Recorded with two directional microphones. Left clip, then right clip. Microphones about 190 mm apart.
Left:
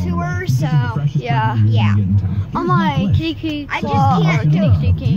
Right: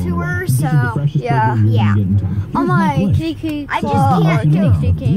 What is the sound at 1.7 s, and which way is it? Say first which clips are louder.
Speech: right 2 dB; 45° right (ahead or behind).